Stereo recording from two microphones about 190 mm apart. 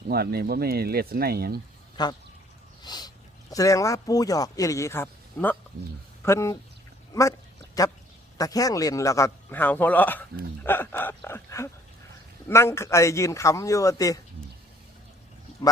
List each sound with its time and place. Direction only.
0.1 s speech: 55° right (ahead or behind)
2.0 s speech: 20° left (ahead or behind)
2.8 s a sound: 20° left (ahead or behind)
3.5 s speech: 15° left (ahead or behind)